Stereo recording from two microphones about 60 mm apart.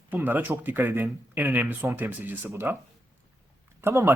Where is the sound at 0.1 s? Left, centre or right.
Right.